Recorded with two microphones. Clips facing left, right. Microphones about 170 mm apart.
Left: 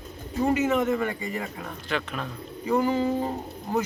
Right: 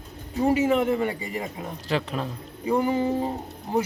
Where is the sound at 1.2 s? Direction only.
15° right (ahead or behind).